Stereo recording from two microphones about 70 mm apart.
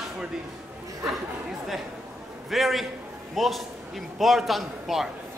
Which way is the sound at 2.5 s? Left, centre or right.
Centre.